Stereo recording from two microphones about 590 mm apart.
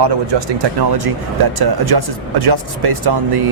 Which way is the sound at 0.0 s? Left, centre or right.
Right.